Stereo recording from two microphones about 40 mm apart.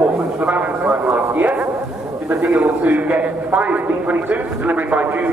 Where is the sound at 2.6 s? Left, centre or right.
Right.